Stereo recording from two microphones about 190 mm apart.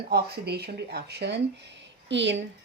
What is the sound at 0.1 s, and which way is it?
A woman's voice, 55° right (ahead or behind).